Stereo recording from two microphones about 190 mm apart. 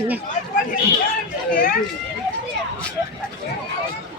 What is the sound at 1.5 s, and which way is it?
Speech, 50° left (ahead or behind).